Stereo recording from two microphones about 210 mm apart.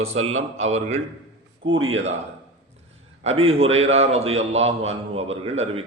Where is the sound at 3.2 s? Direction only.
30° right (ahead or behind).